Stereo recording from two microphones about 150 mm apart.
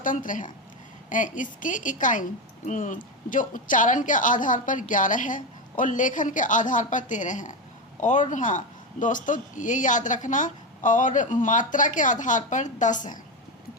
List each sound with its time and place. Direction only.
0.0 s speech: 60° left (ahead or behind)